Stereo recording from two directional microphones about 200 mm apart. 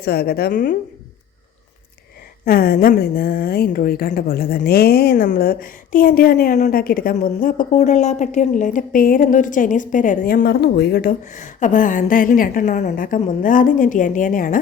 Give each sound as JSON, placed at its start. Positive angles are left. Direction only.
{"t": 0.0, "sound": "a woman's voice", "side_deg": 50}
{"t": 2.4, "sound": "a woman's voice", "side_deg": 50}